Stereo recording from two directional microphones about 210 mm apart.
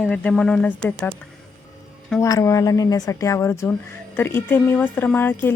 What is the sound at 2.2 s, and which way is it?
Speech, 15° left (ahead or behind).